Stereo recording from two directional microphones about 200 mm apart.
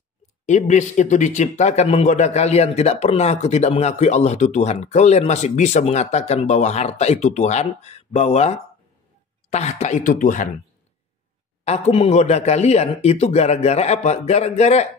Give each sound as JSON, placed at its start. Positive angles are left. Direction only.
{"t": 0.5, "sound": "a man's voice", "side_deg": 35}
{"t": 11.6, "sound": "a man's voice", "side_deg": 30}